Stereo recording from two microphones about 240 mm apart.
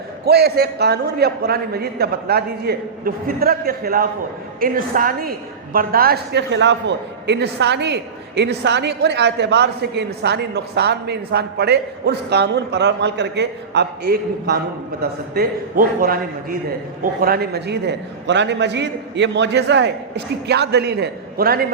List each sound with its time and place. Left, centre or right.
0.3 s a man's voice: right